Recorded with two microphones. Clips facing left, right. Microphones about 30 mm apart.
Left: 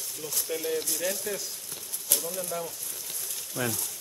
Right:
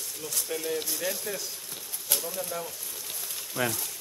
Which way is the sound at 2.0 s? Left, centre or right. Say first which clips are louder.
Even; centre.